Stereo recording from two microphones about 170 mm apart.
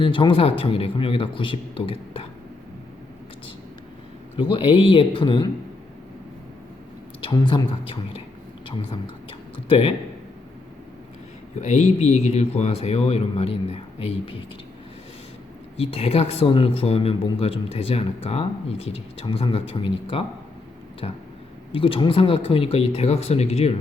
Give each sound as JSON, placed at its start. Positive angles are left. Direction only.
{"t": 0.0, "sound": "speech", "side_deg": 30}
{"t": 4.4, "sound": "speech", "side_deg": 30}
{"t": 7.2, "sound": "speech", "side_deg": 30}
{"t": 11.6, "sound": "speech", "side_deg": 40}
{"t": 15.8, "sound": "speech", "side_deg": 35}